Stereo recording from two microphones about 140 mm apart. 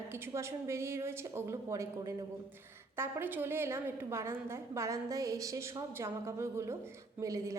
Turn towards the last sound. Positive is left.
turn(degrees=-25)  # may be behind; listen again after turning